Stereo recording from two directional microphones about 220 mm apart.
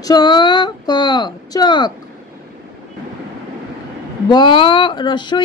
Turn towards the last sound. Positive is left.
turn(degrees=20)  # may be behind; listen again after turning